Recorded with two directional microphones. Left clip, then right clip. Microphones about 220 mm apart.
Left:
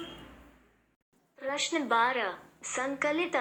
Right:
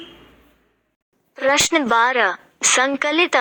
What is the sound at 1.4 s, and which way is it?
A woman's voice, 45° right (ahead or behind).